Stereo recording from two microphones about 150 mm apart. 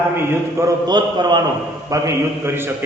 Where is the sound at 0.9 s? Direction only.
30° right (ahead or behind).